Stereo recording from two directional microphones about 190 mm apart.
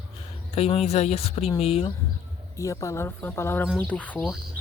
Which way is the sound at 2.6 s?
15° left (ahead or behind).